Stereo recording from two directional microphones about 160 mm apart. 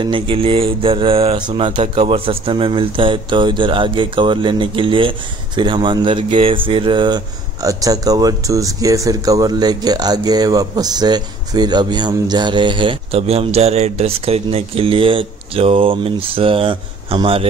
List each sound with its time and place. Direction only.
0.0 s speech: 35° right (ahead or behind)